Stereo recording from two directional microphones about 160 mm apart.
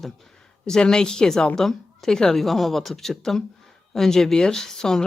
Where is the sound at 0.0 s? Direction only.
Centre (ahead or behind).